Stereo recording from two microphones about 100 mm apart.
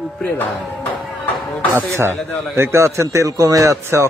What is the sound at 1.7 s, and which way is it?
A man's voice, 30° right (ahead or behind).